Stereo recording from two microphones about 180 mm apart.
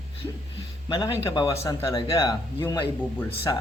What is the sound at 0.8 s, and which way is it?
A man's voice, 25° left (ahead or behind).